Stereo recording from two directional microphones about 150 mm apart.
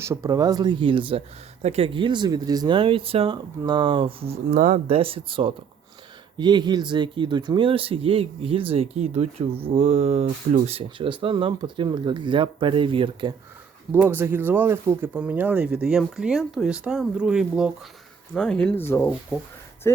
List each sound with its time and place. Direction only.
0.0 s speech: 20° right (ahead or behind); by 10.8 s 45° right (ahead or behind)
10.8 s speech: 35° right (ahead or behind)
13.9 s speech: 15° right (ahead or behind); by 18.9 s 5° left (ahead or behind)
18.9 s speech: 15° left (ahead or behind)